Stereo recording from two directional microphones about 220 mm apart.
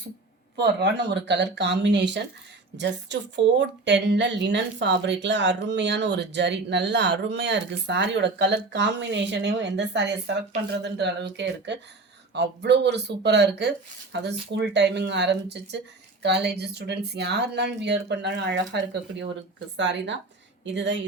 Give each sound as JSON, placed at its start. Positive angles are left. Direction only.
{"t": 0.5, "sound": "speech", "side_deg": -50}